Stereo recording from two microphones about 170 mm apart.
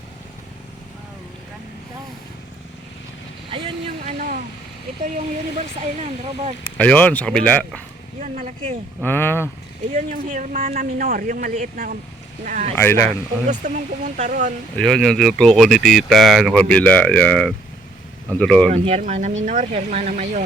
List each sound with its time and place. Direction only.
3.5 s vehicle: 30° right (ahead or behind)
6.0 s speech: 40° right (ahead or behind)
6.7 s speech: 10° left (ahead or behind)
8.2 s speech: 45° right (ahead or behind)
9.0 s speech: 10° left (ahead or behind)
9.9 s speech: 50° right (ahead or behind)
12.7 s speech: 15° left (ahead or behind)
13.5 s speech: 45° right (ahead or behind)
14.8 s speech: centre (ahead or behind)
18.7 s speech: 45° right (ahead or behind)